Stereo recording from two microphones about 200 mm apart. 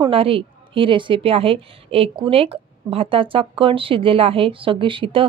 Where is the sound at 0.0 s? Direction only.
30° right (ahead or behind).